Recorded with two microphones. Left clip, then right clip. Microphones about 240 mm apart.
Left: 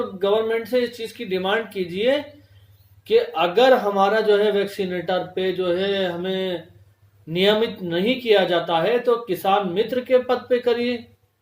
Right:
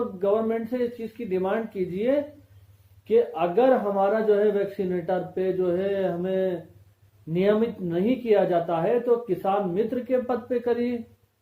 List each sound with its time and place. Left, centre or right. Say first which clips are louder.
0.2 s speech: left 4 dB; left